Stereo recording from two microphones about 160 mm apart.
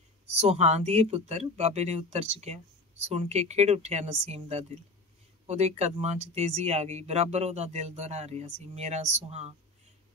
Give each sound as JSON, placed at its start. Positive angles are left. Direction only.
{"t": 0.4, "sound": "speech", "side_deg": -40}